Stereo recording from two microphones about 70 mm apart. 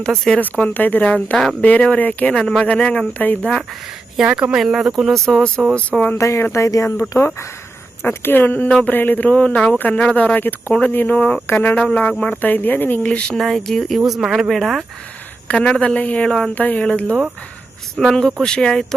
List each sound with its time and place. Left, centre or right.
0.0 s speech: centre
0.3 s speech: left
1.0 s speech: centre
2.3 s speech: centre
4.2 s speech: centre
4.6 s speech: centre
5.2 s speech: centre
6.1 s speech: left
8.0 s speech: left
9.3 s speech: centre
13.1 s speech: centre
13.3 s speech: centre
15.4 s speech: centre